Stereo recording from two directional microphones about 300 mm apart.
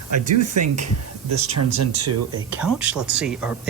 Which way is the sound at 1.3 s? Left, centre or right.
Right.